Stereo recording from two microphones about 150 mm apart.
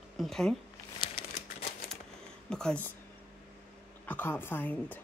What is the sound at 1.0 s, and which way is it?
Crumpling, 35° left (ahead or behind).